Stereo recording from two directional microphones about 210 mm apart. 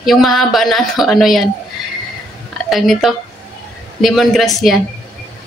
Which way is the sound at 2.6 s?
Centre (ahead or behind).